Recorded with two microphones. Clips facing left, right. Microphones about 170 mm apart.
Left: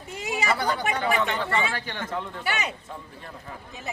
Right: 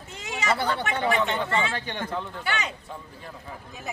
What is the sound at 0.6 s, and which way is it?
Speech, 25° right (ahead or behind).